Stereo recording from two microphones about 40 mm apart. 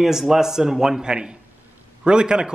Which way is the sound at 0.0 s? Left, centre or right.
Centre.